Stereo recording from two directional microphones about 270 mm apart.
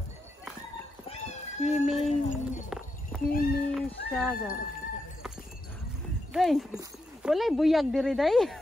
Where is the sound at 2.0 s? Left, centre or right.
Left.